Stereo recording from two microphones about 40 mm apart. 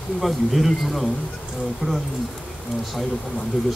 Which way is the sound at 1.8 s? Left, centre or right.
Right.